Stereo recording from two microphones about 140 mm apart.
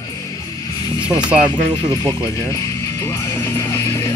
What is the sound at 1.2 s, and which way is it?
Speech, 10° right (ahead or behind).